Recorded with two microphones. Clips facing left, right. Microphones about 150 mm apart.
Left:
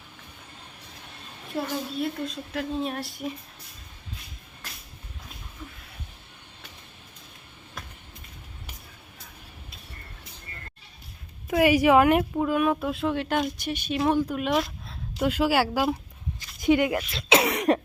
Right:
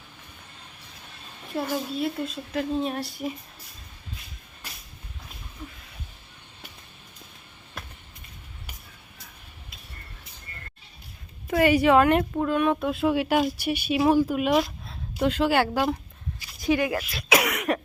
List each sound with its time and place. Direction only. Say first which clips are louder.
1.6 s speech: right 3 dB; 5° right (ahead or behind)
11.4 s speech: even; 10° left (ahead or behind)
16.6 s speech: left 2 dB; 20° left (ahead or behind)